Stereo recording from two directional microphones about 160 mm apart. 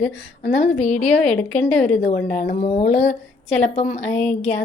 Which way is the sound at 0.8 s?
45° left (ahead or behind).